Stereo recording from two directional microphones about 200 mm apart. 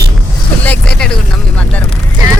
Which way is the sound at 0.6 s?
5° left (ahead or behind).